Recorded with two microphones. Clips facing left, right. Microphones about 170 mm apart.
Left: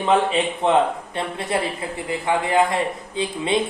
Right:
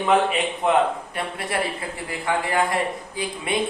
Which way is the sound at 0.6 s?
25° left (ahead or behind).